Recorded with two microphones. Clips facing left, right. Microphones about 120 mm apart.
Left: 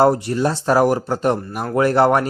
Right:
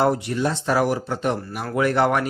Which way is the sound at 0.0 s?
40° left (ahead or behind).